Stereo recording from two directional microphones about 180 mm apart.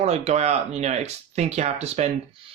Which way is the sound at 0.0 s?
35° right (ahead or behind).